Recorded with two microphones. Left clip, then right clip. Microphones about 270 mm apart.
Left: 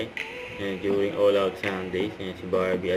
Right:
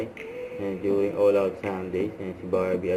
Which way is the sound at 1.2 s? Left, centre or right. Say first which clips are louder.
Even; centre.